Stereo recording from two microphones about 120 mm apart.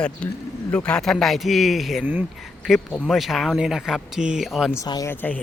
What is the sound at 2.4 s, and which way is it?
Speech, centre (ahead or behind).